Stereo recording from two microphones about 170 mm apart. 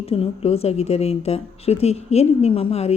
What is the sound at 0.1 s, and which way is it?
A woman's voice, 35° left (ahead or behind).